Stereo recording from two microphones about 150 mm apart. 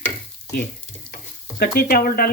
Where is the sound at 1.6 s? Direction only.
90° left.